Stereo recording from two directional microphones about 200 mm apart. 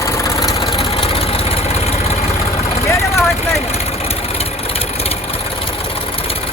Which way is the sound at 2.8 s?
15° left (ahead or behind).